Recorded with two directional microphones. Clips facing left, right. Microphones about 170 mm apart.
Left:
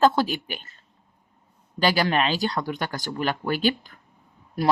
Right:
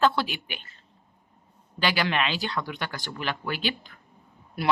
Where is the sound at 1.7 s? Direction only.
40° left (ahead or behind).